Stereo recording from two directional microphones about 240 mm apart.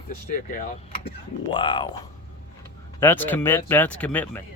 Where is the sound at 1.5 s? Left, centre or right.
Centre.